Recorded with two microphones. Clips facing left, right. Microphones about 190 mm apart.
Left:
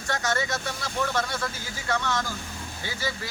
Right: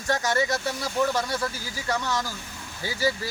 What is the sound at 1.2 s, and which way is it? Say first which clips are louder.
Speech: right 1 dB; 10° right (ahead or behind).